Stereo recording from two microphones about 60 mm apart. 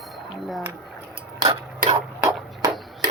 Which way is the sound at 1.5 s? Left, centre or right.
Right.